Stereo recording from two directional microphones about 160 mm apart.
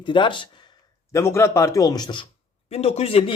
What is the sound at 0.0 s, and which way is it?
Speech, 30° left (ahead or behind).